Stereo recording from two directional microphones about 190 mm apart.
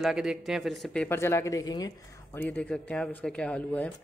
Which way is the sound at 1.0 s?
15° left (ahead or behind).